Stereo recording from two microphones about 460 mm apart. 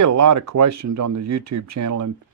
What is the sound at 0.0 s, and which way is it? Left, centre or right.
Speech, right.